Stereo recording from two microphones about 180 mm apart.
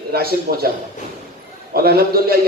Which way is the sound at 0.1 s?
55° right (ahead or behind).